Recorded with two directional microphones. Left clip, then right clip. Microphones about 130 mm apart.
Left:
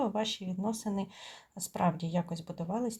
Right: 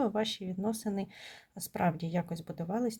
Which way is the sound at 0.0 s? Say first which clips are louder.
Right 1 dB; 40° right (ahead or behind).